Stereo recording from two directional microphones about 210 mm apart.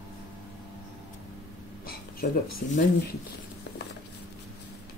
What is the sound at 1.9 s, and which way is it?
Speech, 45° left (ahead or behind).